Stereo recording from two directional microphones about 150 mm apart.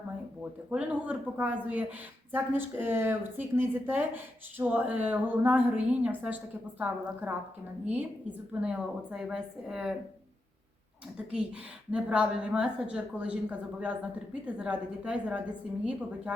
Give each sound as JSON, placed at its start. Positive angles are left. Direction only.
{"t": 0.7, "sound": "a woman's voice", "side_deg": -10}
{"t": 11.9, "sound": "speech", "side_deg": -10}